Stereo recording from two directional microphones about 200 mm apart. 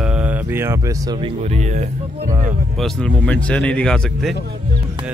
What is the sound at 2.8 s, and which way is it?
Speech, 5° left (ahead or behind).